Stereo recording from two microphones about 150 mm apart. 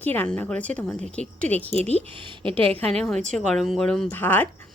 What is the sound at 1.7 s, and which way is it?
Speech, 45° right (ahead or behind).